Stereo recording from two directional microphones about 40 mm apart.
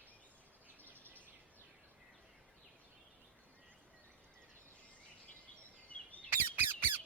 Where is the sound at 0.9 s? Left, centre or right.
Right.